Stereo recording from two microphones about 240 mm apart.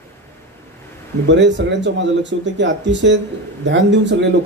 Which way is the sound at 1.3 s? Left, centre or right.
Right.